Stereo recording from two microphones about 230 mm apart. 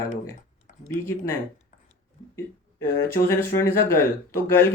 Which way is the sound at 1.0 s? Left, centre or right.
Centre.